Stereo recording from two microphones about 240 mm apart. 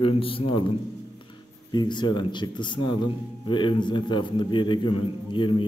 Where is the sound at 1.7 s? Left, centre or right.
Centre.